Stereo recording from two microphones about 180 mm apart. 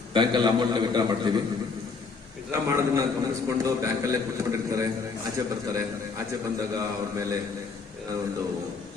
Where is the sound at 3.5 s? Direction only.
15° right (ahead or behind).